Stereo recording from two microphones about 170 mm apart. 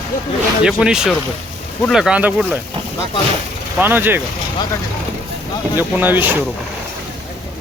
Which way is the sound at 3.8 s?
10° right (ahead or behind).